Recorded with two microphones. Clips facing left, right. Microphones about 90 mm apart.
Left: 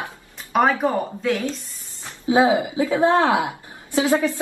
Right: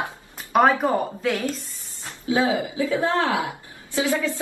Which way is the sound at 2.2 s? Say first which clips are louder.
Left 5 dB; 25° left (ahead or behind).